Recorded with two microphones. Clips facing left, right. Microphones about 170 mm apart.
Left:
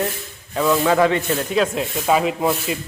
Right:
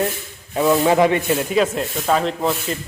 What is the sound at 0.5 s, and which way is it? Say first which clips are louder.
Speech: right 2 dB; 20° right (ahead or behind).